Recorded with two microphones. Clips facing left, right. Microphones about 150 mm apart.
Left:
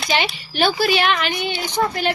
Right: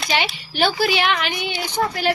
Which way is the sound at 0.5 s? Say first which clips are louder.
Left 1 dB; 15° right (ahead or behind).